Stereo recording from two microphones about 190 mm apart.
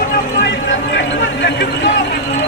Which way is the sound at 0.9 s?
65° left (ahead or behind).